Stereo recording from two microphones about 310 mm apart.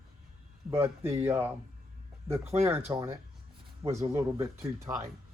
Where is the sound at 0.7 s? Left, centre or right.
Centre.